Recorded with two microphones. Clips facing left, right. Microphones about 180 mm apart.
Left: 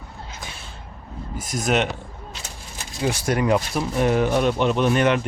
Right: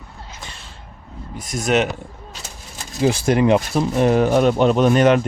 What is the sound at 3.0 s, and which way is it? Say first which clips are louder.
Speech: right 6 dB; 25° right (ahead or behind).